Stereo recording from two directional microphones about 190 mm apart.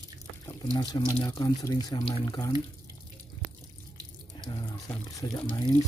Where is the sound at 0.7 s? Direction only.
20° left (ahead or behind).